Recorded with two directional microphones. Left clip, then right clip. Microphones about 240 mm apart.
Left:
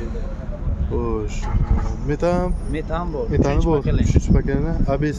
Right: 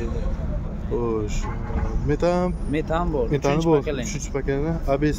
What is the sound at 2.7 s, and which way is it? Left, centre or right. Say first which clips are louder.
Speech: right 2 dB; right.